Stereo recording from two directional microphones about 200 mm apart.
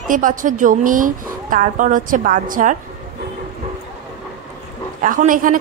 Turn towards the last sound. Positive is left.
turn(degrees=-40)  # may be behind; listen again after turning